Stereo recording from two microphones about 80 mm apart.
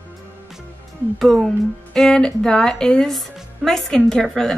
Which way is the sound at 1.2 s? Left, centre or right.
Centre.